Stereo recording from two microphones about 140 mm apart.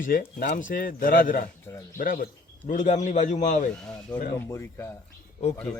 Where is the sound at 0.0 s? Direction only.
80° left; by 3.7 s 60° left (ahead or behind).